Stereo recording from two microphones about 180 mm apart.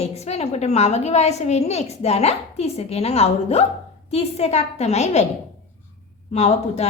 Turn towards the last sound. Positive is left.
turn(degrees=35)  # may be behind; listen again after turning